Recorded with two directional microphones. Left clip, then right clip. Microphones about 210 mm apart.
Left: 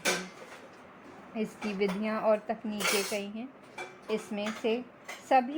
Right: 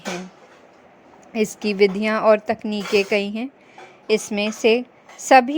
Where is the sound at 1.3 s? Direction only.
35° right (ahead or behind).